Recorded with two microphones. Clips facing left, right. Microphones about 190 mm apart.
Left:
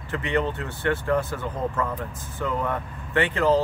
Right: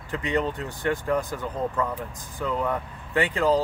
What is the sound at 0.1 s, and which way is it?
Speech, 15° right (ahead or behind).